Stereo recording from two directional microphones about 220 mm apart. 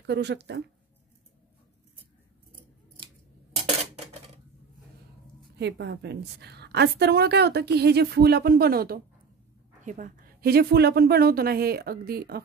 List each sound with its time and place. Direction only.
0.0 s a woman's voice: 50° right (ahead or behind)
5.6 s a woman's voice: 50° right (ahead or behind)